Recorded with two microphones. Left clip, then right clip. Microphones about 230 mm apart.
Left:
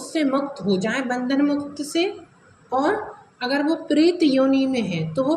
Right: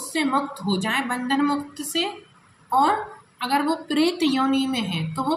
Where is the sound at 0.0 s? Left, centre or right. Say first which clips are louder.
Left 1 dB; right.